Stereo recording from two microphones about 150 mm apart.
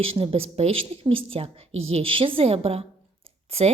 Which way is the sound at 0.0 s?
40° right (ahead or behind).